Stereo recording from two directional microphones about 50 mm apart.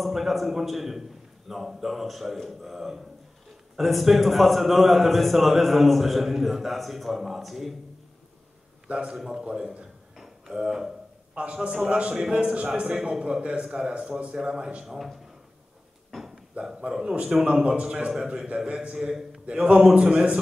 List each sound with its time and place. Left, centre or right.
0.0 s a man's voice: centre
8.8 s a man's voice: right
9.1 s a man's voice: centre
9.4 s a man's voice: centre
10.1 s a sound: centre
11.3 s a man's voice: right; by 15.1 s centre
16.5 s a man's voice: centre
18.9 s a man's voice: centre
19.4 s a man's voice: centre